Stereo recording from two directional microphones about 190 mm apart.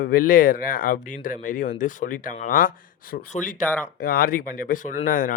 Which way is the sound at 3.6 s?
10° left (ahead or behind).